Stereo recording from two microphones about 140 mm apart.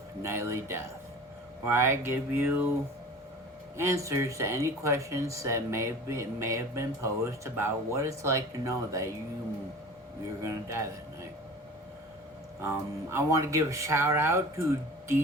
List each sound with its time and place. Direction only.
0.2 s a sound: 20° right (ahead or behind)
3.8 s speech: 20° right (ahead or behind)
10.4 s speech: 20° right (ahead or behind)
12.6 s speech: 20° right (ahead or behind)